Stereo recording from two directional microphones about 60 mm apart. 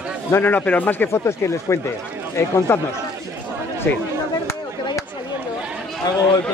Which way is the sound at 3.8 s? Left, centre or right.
Left.